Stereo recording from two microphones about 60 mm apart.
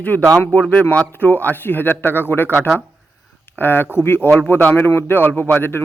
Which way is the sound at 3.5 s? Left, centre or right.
Left.